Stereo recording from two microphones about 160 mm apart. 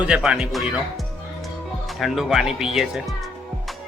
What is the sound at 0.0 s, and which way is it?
Speech, 5° right (ahead or behind).